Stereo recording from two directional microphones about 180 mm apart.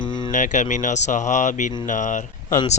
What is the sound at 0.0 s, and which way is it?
Music, 25° left (ahead or behind).